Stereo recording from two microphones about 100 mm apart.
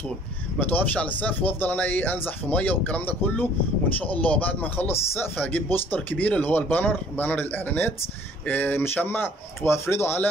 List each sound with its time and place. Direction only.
0.6 s speech: 15° left (ahead or behind)